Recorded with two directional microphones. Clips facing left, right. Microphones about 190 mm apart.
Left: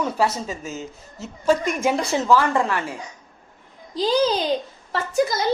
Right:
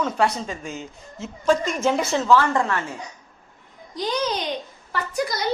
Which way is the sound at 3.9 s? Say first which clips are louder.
Left 5 dB; 30° left (ahead or behind).